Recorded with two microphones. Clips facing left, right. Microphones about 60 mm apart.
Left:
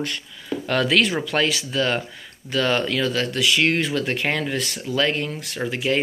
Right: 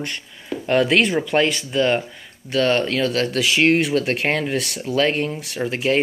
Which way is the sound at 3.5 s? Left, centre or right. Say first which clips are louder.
Right 5 dB; right.